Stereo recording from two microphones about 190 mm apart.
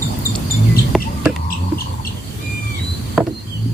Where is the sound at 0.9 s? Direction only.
Centre (ahead or behind).